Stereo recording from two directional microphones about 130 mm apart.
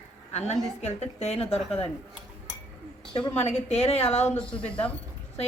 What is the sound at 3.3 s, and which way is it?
Speech, 60° left (ahead or behind).